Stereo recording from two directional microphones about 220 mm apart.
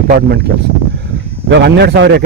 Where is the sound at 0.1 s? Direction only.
45° right (ahead or behind).